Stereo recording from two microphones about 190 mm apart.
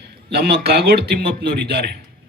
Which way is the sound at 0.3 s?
55° right (ahead or behind).